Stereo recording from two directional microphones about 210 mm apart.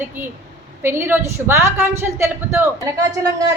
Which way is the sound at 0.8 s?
10° right (ahead or behind).